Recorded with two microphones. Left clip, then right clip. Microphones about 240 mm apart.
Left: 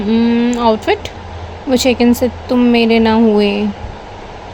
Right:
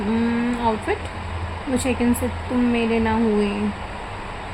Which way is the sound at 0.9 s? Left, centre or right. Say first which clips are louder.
Left 9 dB; left.